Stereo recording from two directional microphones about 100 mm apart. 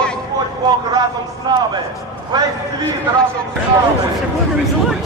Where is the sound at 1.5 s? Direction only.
40° right (ahead or behind).